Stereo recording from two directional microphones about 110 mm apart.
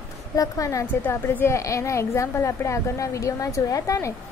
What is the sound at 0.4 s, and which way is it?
Speech, 30° left (ahead or behind).